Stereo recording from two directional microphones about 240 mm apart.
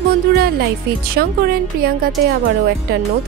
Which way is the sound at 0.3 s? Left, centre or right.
Right.